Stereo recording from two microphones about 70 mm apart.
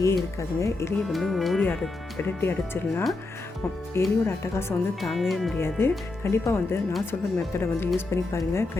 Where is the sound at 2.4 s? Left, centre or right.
Left.